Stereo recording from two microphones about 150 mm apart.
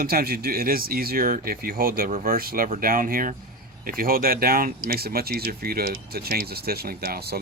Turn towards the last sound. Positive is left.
turn(degrees=-90)